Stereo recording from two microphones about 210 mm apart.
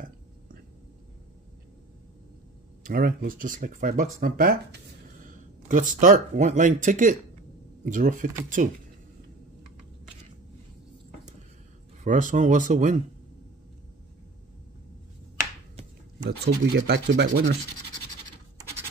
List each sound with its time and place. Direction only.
2.8 s speech: 45° right (ahead or behind)
12.0 s speech: 35° right (ahead or behind)
16.3 s speech: 50° right (ahead or behind)